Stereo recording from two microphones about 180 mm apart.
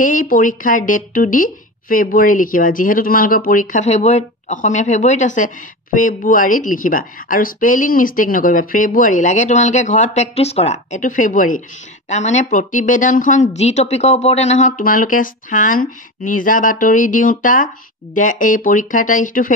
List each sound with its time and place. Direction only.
0.0 s speech: 50° left (ahead or behind)
14.8 s speech: 50° left (ahead or behind)